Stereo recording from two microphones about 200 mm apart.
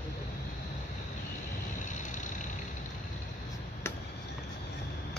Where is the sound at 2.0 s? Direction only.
40° left (ahead or behind).